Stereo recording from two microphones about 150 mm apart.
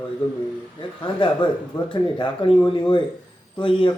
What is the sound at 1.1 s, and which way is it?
Speech, 35° left (ahead or behind).